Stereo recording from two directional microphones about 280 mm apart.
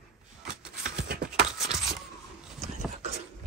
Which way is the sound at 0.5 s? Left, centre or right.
Right.